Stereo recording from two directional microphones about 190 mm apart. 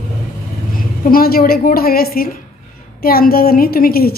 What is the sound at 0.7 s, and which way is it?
A woman's voice, 50° left (ahead or behind).